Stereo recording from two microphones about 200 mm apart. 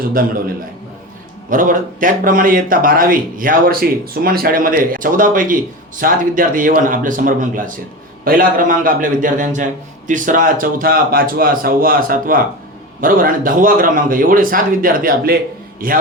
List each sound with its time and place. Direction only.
0.0 s a man's voice: 45° right (ahead or behind)
1.5 s a man's voice: 45° right (ahead or behind)